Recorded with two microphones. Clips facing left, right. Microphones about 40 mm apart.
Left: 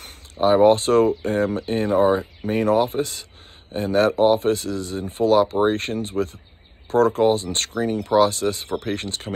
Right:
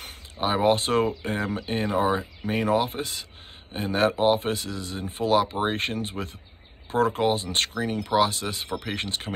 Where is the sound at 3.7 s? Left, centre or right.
Right.